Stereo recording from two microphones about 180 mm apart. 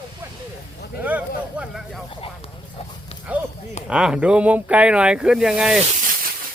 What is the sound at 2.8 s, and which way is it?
Dog, 35° left (ahead or behind).